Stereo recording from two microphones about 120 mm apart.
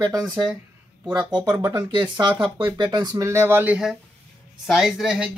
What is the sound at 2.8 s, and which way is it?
Speech, 35° right (ahead or behind).